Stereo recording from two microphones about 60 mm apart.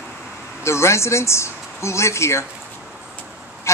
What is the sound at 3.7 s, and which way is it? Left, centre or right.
Goose, left.